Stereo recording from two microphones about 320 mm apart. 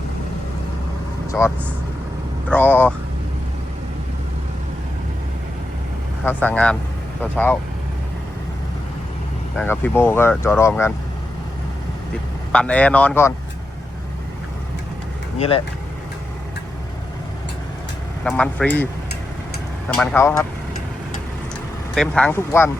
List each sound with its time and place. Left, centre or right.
1.3 s speech: centre
6.2 s speech: centre
9.6 s speech: centre
12.5 s speech: centre
15.4 s speech: centre
18.2 s speech: centre
19.9 s speech: centre
21.9 s speech: centre